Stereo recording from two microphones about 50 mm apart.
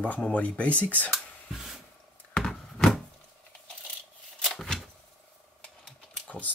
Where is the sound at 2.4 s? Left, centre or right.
Centre.